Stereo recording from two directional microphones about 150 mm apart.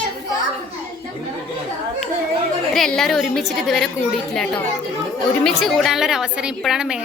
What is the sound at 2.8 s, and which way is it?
A woman's voice, centre (ahead or behind).